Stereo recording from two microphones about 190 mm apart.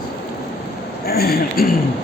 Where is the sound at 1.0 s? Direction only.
55° left (ahead or behind).